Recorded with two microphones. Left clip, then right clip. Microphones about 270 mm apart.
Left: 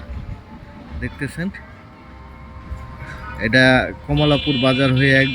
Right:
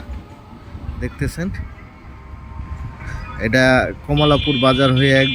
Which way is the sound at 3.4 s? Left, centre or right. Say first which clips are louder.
Even; centre.